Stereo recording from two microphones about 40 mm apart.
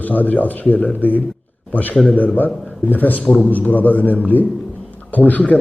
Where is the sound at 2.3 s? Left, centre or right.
Left.